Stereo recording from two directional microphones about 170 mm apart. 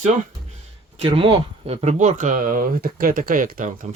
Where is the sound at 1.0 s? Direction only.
30° right (ahead or behind).